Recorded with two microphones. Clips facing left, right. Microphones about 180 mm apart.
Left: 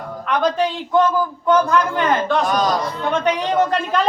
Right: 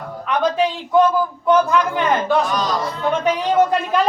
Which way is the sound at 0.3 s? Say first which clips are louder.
Even; 10° right (ahead or behind).